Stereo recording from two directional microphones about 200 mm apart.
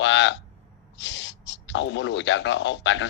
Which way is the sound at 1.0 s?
65° left (ahead or behind).